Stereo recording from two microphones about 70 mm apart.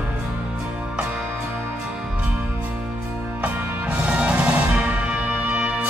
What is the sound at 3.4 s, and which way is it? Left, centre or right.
Music, centre.